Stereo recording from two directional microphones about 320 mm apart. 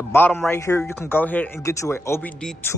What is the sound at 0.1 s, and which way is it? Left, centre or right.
A man's voice, centre.